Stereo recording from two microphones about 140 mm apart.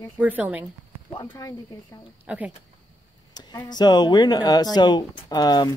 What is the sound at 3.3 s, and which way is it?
Speech, 30° left (ahead or behind).